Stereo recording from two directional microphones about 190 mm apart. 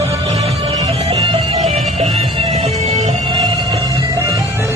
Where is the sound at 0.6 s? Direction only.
20° right (ahead or behind).